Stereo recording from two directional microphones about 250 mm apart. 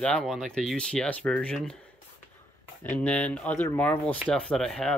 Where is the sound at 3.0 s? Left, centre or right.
Centre.